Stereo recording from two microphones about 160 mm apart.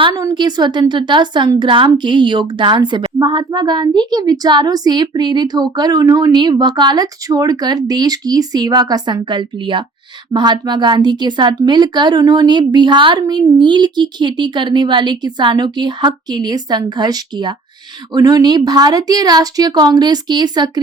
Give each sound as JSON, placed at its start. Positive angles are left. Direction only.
{"t": 0.2, "sound": "a woman's voice", "side_deg": -25}